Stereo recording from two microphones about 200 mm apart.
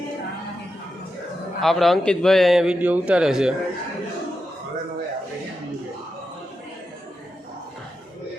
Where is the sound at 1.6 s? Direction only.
Centre (ahead or behind).